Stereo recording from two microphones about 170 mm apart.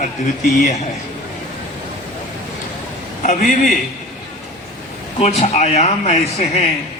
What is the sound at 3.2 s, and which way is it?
Speech, 50° left (ahead or behind).